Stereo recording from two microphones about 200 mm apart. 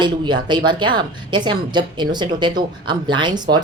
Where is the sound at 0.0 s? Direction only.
20° right (ahead or behind).